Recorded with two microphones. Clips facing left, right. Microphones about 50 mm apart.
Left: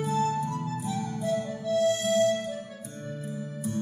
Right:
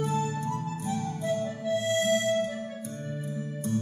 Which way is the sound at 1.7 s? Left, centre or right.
Right.